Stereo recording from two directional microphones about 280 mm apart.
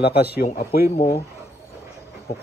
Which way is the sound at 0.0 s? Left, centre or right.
Left.